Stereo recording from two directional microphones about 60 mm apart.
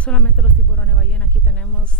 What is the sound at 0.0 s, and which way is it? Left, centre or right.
Speech, centre.